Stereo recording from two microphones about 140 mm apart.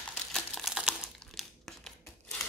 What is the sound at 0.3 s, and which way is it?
Crumpling, centre (ahead or behind).